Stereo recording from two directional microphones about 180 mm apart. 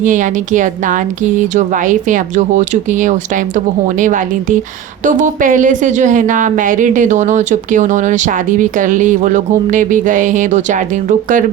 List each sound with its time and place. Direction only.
0.0 s a woman's voice: 45° right (ahead or behind)